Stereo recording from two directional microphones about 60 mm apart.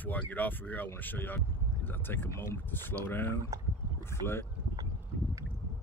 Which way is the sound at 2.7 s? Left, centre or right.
Left.